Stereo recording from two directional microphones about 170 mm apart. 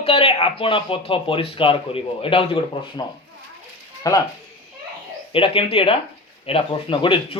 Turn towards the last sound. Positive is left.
turn(degrees=30)  # may be behind; listen again after turning